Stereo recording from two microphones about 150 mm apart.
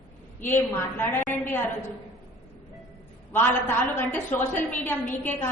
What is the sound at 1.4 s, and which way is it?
Speech, 15° left (ahead or behind).